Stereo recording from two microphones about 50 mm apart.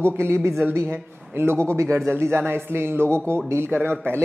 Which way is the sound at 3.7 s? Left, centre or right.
Right.